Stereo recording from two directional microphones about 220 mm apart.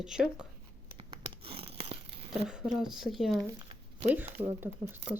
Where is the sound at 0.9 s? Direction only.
25° right (ahead or behind).